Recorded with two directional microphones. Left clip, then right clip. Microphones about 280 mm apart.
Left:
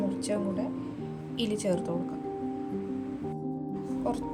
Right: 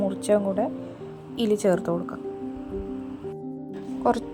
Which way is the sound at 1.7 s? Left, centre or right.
Right.